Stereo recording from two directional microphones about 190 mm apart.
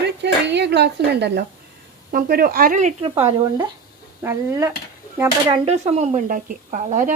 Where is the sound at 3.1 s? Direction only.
15° right (ahead or behind).